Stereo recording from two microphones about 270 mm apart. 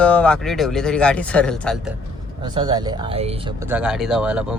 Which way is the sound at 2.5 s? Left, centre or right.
Centre.